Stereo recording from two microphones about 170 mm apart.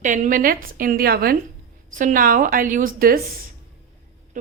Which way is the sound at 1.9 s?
50° right (ahead or behind).